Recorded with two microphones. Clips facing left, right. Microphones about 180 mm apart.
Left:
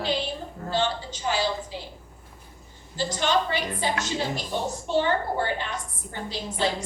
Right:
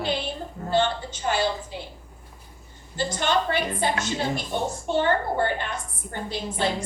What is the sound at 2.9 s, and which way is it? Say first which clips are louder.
A woman's voice: even; 55° right (ahead or behind).